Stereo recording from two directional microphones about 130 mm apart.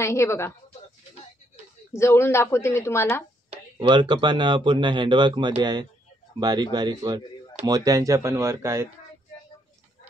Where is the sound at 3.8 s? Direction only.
35° right (ahead or behind); by 8.9 s 20° right (ahead or behind).